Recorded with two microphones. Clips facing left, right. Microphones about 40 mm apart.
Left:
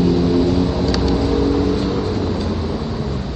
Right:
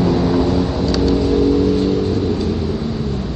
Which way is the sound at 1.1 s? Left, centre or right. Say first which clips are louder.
Right 2 dB; left.